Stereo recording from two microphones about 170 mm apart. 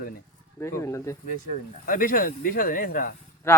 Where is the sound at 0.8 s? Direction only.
15° left (ahead or behind).